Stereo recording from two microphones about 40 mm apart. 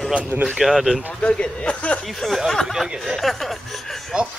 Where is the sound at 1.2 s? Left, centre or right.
Left.